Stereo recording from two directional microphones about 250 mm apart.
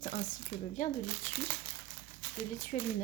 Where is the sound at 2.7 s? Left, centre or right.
Left.